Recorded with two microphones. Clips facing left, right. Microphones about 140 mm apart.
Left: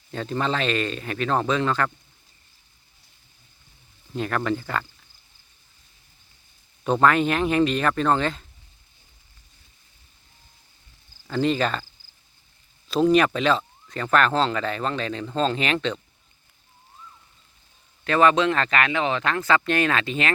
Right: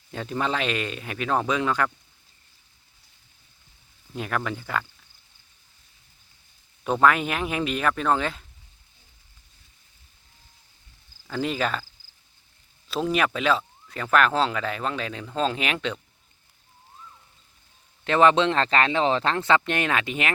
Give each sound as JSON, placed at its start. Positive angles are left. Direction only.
{"t": 0.1, "sound": "speech", "side_deg": -10}
{"t": 4.1, "sound": "speech", "side_deg": -5}
{"t": 6.8, "sound": "speech", "side_deg": -5}
{"t": 11.3, "sound": "speech", "side_deg": -5}
{"t": 12.9, "sound": "speech", "side_deg": -5}
{"t": 18.0, "sound": "speech", "side_deg": -20}